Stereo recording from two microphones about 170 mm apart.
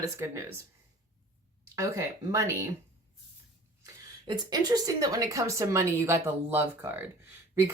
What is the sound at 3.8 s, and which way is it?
A woman's voice, 25° right (ahead or behind).